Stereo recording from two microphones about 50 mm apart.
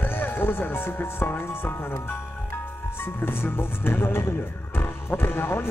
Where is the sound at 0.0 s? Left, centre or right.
Left.